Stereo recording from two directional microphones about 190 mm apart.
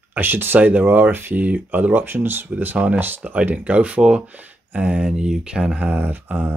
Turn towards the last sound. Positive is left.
turn(degrees=-10)  # may be behind; listen again after turning